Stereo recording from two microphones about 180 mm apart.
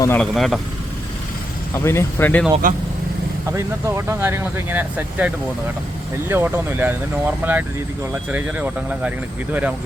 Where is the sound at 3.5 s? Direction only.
15° right (ahead or behind).